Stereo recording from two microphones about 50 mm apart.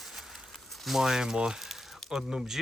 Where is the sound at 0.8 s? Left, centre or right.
Centre.